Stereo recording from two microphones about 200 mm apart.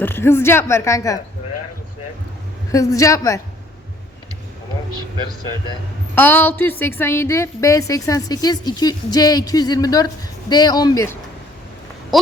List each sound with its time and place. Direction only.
0.0 s a woman's voice: 10° left (ahead or behind)
2.7 s a woman's voice: 15° left (ahead or behind)
6.1 s a woman's voice: 10° left (ahead or behind)